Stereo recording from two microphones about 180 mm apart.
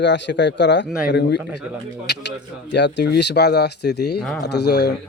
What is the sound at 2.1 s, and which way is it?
A man's voice, 65° left (ahead or behind).